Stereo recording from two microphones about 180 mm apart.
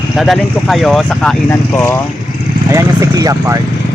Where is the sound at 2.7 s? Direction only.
15° right (ahead or behind).